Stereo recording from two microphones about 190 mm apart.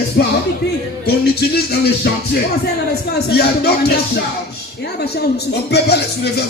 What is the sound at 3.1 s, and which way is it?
Speech, 60° left (ahead or behind).